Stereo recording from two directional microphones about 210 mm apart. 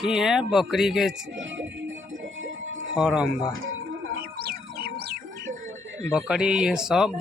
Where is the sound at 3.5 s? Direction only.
70° right (ahead or behind).